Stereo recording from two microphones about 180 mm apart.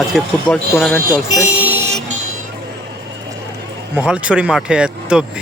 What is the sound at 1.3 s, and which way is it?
Speech, 15° left (ahead or behind).